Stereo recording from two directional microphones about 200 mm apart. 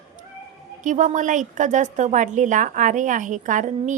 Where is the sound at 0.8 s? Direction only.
40° right (ahead or behind).